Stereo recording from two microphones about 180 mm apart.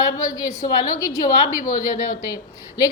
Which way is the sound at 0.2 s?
20° left (ahead or behind).